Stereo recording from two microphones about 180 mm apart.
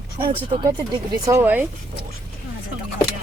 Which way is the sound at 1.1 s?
15° right (ahead or behind).